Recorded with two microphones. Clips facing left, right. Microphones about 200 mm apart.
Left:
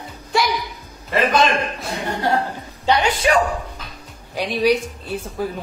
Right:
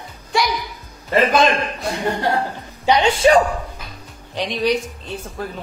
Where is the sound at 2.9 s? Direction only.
25° right (ahead or behind).